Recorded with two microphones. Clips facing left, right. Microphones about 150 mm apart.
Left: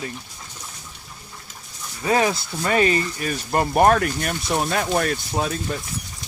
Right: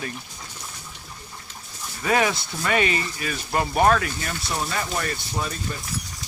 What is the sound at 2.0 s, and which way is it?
Speech, 30° left (ahead or behind).